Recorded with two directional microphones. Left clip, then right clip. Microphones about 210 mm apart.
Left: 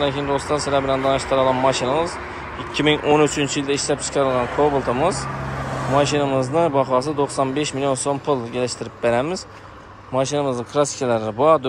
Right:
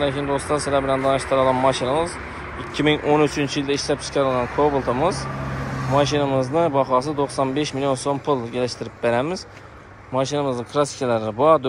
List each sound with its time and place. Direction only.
0.0 s speech: 5° left (ahead or behind)
4.6 s speech: 30° left (ahead or behind)
5.9 s speech: 5° left (ahead or behind)